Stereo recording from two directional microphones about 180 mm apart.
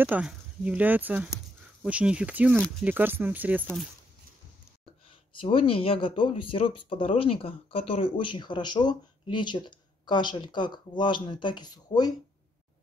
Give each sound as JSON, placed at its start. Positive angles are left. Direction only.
{"t": 0.0, "sound": "speech", "side_deg": -10}
{"t": 3.6, "sound": "speech", "side_deg": 0}
{"t": 5.4, "sound": "speech", "side_deg": 30}